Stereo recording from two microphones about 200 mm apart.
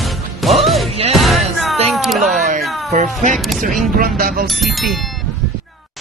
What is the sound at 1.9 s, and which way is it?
Cat, centre (ahead or behind).